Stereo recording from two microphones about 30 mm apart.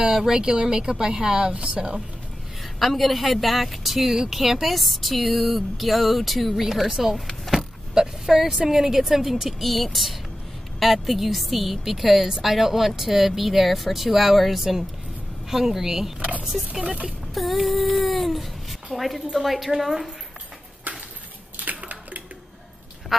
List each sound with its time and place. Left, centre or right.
0.3 s speech: right
1.5 s speech: right
2.8 s speech: centre
9.6 s speech: centre
16.2 s a sound: right
16.8 s speech: right
17.3 s a sound: centre
18.9 s speech: centre
21.5 s a sound: right